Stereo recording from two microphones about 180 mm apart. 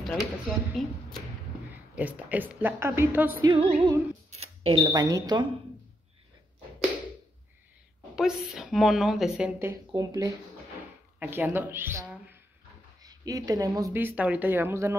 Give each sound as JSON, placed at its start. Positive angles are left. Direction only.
{"t": 0.0, "sound": "a woman's voice", "side_deg": 0}
{"t": 1.7, "sound": "speech", "side_deg": -10}
{"t": 3.4, "sound": "speech", "side_deg": -30}
{"t": 8.2, "sound": "a woman's voice", "side_deg": -5}
{"t": 9.9, "sound": "speech", "side_deg": -20}
{"t": 11.1, "sound": "a woman's voice", "side_deg": -10}